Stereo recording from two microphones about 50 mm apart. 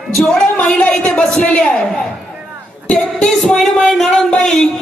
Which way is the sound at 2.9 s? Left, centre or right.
Centre.